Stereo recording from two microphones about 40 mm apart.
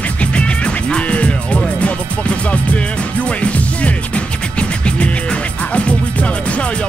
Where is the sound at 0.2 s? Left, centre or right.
Left.